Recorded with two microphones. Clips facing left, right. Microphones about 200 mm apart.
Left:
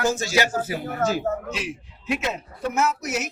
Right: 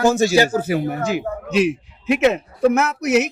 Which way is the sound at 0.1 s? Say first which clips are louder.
Right 9 dB; 65° right (ahead or behind).